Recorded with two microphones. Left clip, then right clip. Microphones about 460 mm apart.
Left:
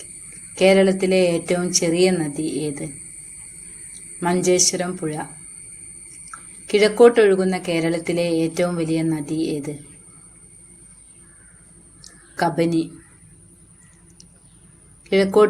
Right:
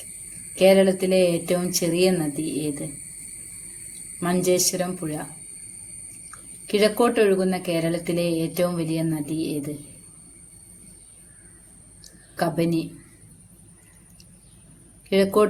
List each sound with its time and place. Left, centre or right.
0.5 s speech: right
4.2 s speech: right
6.7 s speech: right
12.4 s speech: right
15.1 s speech: right